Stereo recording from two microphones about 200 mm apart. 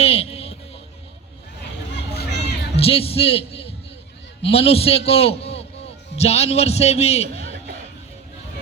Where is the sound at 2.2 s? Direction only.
60° left (ahead or behind).